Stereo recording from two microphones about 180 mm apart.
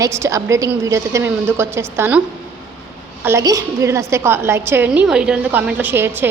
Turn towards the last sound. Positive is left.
turn(degrees=-10)  # may be behind; listen again after turning